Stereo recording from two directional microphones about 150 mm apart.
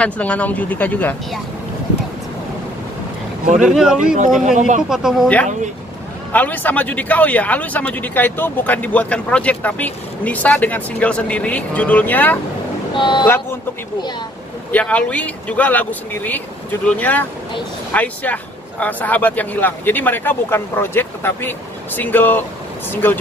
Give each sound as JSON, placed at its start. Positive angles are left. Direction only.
{"t": 0.0, "sound": "speech", "side_deg": 10}
{"t": 3.6, "sound": "speech", "side_deg": -5}
{"t": 4.5, "sound": "speech", "side_deg": -55}
{"t": 4.8, "sound": "speech", "side_deg": -5}
{"t": 6.3, "sound": "speech", "side_deg": 10}
{"t": 12.9, "sound": "speech", "side_deg": 30}
{"t": 14.7, "sound": "speech", "side_deg": 10}